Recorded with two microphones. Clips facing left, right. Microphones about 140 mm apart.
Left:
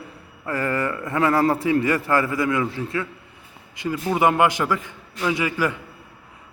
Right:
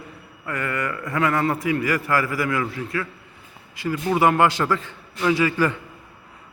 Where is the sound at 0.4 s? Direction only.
30° left (ahead or behind).